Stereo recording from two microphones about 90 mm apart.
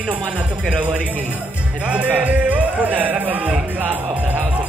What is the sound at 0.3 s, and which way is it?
Speech, 10° right (ahead or behind).